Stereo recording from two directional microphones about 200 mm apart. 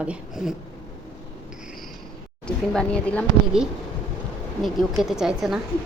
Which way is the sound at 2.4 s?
5° left (ahead or behind).